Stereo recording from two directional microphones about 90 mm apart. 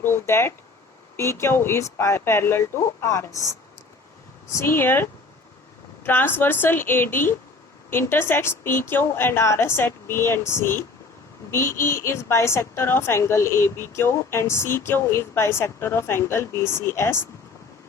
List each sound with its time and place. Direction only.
0.0 s speech: 25° left (ahead or behind)
4.5 s a woman's voice: 25° left (ahead or behind)